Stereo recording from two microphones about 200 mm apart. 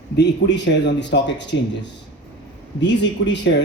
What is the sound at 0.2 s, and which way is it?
Speech, 60° left (ahead or behind).